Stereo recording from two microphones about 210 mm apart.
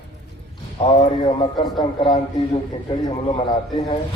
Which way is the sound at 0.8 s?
20° left (ahead or behind).